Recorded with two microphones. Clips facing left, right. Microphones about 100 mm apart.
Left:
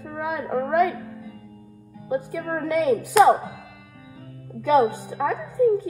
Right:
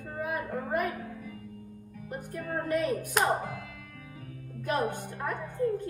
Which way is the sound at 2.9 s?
65° left (ahead or behind).